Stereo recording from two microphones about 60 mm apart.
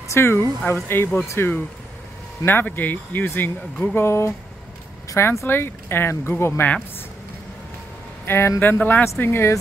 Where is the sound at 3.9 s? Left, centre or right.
Left.